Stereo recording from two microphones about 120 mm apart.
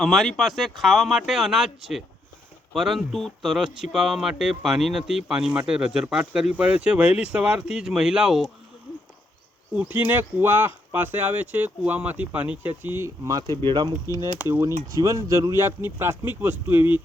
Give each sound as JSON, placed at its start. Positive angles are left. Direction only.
{"t": 0.0, "sound": "speech", "side_deg": 0}
{"t": 9.7, "sound": "speech", "side_deg": -15}
{"t": 13.2, "sound": "speech", "side_deg": -35}
{"t": 14.3, "sound": "speech", "side_deg": -15}
{"t": 15.0, "sound": "speech", "side_deg": -25}